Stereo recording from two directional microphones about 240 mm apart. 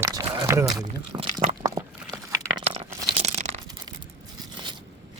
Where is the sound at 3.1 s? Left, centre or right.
Right.